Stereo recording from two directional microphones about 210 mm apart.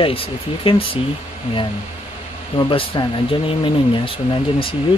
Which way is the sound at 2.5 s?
25° left (ahead or behind).